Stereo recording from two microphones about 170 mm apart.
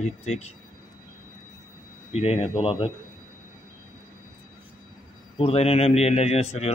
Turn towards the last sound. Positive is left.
turn(degrees=40)  # may be behind; listen again after turning